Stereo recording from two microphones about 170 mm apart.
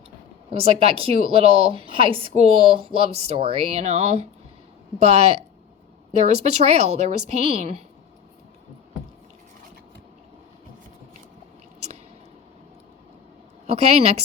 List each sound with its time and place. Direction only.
0.5 s speech: 35° right (ahead or behind)
13.7 s speech: 35° right (ahead or behind)